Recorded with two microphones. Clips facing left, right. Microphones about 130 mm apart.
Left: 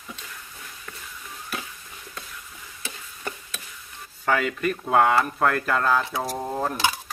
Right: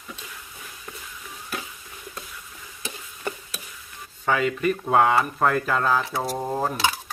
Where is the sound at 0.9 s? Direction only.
25° right (ahead or behind).